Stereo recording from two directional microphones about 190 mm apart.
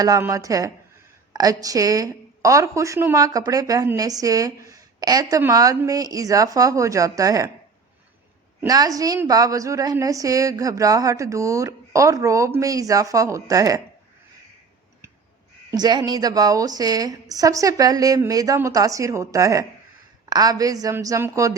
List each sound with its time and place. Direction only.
0.0 s a woman's voice: 15° right (ahead or behind)
8.6 s a woman's voice: 20° right (ahead or behind)
15.7 s a woman's voice: 20° right (ahead or behind)